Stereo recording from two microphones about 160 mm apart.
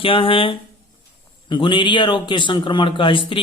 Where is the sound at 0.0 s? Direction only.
35° left (ahead or behind).